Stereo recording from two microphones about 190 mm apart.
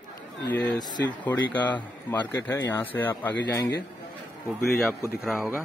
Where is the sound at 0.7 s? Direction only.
20° left (ahead or behind).